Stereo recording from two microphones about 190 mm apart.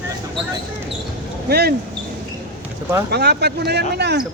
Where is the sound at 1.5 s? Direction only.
55° right (ahead or behind).